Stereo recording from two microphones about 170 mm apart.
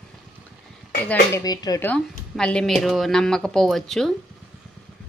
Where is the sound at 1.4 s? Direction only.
20° left (ahead or behind).